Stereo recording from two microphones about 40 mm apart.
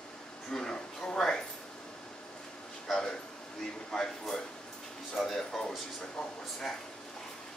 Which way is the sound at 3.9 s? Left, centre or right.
Centre.